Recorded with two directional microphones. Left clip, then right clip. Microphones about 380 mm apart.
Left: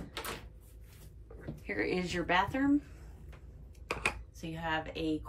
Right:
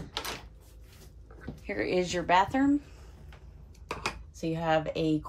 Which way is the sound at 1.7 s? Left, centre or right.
Centre.